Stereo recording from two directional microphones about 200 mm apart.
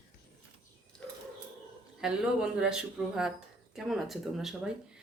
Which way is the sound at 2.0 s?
5° right (ahead or behind).